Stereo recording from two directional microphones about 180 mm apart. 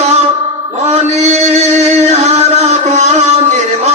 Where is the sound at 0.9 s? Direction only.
40° right (ahead or behind).